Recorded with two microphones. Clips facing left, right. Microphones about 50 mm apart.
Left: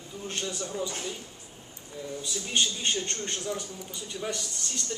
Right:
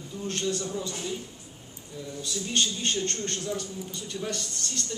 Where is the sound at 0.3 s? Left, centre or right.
Centre.